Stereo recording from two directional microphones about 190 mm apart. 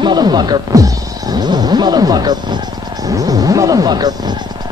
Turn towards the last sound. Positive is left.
turn(degrees=-20)  # may be behind; listen again after turning